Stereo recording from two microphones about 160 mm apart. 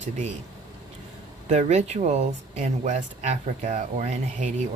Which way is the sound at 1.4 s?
45° right (ahead or behind).